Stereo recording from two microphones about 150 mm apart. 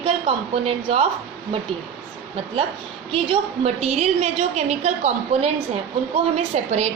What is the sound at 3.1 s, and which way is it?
A woman's voice, 40° right (ahead or behind).